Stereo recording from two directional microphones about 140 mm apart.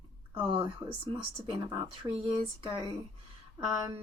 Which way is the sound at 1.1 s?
40° right (ahead or behind).